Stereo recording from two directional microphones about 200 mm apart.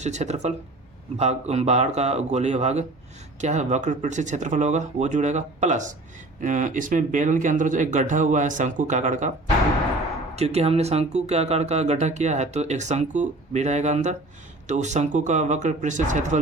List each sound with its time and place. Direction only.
0.0 s speech: 35° right (ahead or behind)
10.3 s speech: 30° right (ahead or behind)